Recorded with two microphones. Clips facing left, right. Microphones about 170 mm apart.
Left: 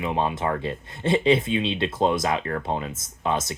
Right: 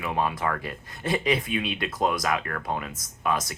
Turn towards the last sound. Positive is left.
turn(degrees=25)  # may be behind; listen again after turning